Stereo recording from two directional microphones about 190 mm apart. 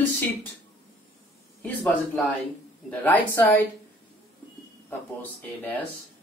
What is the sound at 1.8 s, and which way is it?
Speech, 10° left (ahead or behind).